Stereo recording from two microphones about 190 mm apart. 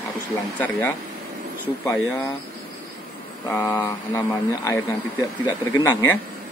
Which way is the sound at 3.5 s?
15° left (ahead or behind).